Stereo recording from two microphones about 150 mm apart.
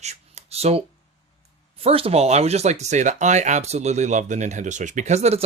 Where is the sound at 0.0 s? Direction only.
45° right (ahead or behind).